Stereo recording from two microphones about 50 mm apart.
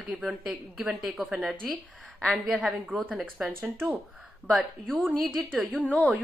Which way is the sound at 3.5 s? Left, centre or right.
Right.